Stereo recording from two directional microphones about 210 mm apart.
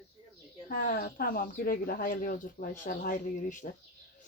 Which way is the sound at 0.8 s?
45° left (ahead or behind).